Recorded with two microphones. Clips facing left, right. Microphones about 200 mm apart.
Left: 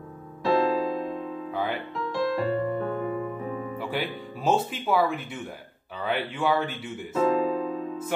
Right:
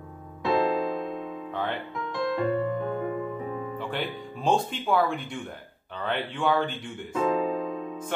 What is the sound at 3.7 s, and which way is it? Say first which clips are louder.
Speech: left 1 dB; 10° left (ahead or behind).